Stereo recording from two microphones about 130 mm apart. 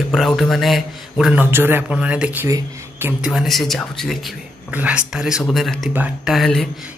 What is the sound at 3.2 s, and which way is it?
Speech, centre (ahead or behind).